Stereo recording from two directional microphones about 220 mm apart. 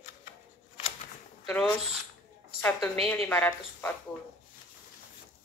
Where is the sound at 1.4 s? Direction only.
5° left (ahead or behind).